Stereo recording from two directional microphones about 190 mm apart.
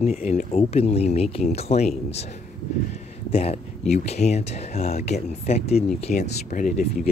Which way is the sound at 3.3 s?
30° left (ahead or behind).